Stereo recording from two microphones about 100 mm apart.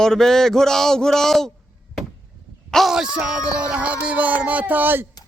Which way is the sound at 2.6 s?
Centre (ahead or behind).